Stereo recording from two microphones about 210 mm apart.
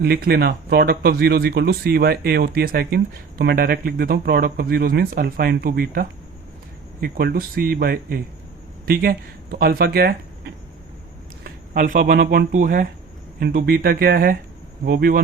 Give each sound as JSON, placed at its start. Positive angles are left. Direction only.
{"t": 0.0, "sound": "speech", "side_deg": -45}
{"t": 11.4, "sound": "speech", "side_deg": -40}